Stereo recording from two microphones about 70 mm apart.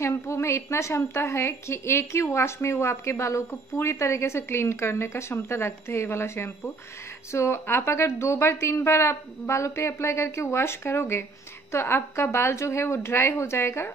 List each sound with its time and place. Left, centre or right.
0.0 s a woman's voice: left